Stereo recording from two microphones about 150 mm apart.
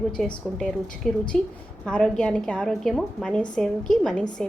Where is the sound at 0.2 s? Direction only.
Centre (ahead or behind).